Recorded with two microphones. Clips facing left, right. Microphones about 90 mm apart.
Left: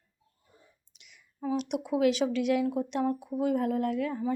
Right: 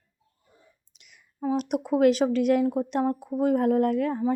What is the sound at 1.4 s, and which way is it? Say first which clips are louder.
Speech: right 4 dB; 40° right (ahead or behind).